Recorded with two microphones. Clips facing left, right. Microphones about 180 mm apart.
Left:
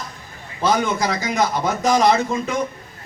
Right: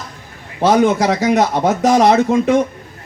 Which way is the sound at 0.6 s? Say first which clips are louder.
Right 7 dB; 75° right (ahead or behind).